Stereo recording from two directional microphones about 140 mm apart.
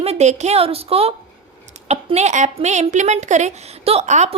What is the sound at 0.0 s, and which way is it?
A woman's voice, 50° right (ahead or behind).